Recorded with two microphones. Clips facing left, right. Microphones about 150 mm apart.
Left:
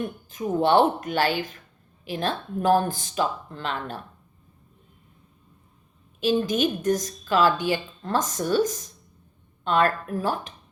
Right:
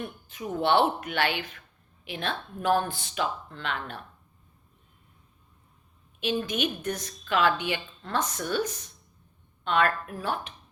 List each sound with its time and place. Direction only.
0.0 s a woman's voice: 45° left (ahead or behind)
6.1 s a woman's voice: 40° left (ahead or behind)